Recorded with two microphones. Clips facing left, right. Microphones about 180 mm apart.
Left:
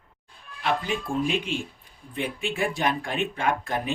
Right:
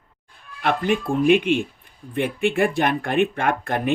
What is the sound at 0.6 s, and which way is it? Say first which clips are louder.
Speech: right 6 dB; 60° right (ahead or behind).